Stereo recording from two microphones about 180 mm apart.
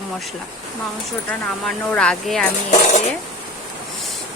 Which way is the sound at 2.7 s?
40° left (ahead or behind).